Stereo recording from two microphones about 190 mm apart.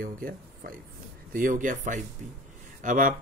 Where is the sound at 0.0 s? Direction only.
45° right (ahead or behind).